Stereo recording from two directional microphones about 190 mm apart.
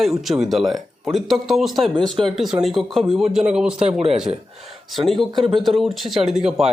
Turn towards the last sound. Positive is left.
turn(degrees=0)  # may be behind; listen again after turning